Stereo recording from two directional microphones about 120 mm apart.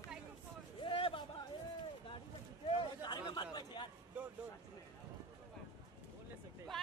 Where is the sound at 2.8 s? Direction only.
40° left (ahead or behind).